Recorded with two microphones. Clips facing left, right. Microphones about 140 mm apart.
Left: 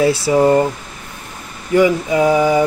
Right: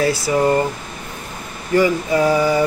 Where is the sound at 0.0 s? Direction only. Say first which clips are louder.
Left 4 dB; 25° left (ahead or behind).